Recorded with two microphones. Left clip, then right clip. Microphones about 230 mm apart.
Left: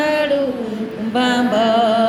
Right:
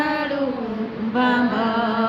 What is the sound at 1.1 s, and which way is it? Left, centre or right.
Music, centre.